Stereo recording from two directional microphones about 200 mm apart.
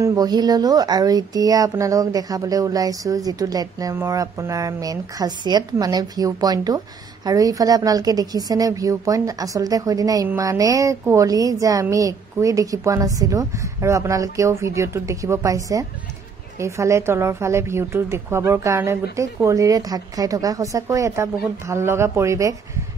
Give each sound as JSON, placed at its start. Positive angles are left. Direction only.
{"t": 0.0, "sound": "a woman's voice", "side_deg": -15}